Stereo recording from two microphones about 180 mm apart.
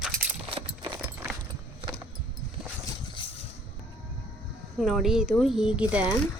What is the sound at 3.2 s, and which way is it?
Vehicle, 30° left (ahead or behind).